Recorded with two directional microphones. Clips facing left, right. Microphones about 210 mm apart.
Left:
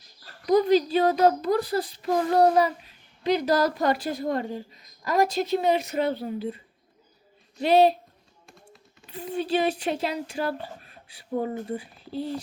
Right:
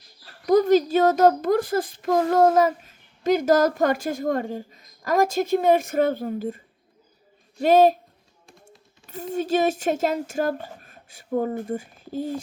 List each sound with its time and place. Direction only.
0.4 s a child's voice: 45° right (ahead or behind)
7.6 s a child's voice: 45° right (ahead or behind)